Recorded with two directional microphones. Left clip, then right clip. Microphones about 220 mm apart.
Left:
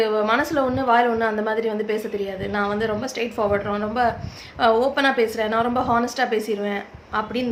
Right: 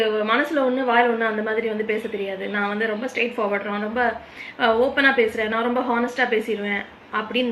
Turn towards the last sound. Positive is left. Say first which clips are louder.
# right 1 dB
turn(degrees=20)  # may be behind; listen again after turning